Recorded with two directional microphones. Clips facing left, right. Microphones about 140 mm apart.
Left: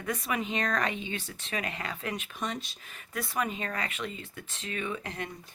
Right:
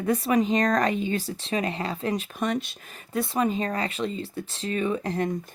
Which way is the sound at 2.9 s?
30° right (ahead or behind).